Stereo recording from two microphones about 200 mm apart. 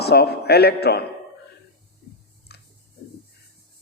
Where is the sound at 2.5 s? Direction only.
55° left (ahead or behind).